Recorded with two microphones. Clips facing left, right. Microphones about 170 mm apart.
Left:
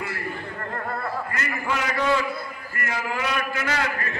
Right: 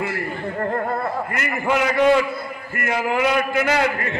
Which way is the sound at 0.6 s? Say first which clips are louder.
Right 11 dB; 35° right (ahead or behind).